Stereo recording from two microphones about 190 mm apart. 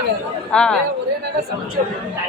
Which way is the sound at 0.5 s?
5° left (ahead or behind).